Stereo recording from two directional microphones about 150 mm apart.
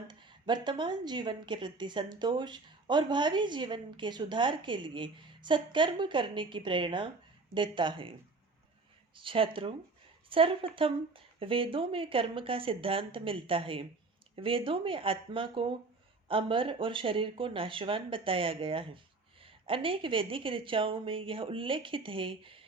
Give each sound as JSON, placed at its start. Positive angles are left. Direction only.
{"t": 0.1, "sound": "a woman's voice", "side_deg": -30}
{"t": 9.1, "sound": "a woman's voice", "side_deg": -35}